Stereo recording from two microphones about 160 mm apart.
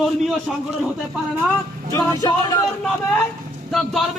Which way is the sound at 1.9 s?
20° left (ahead or behind).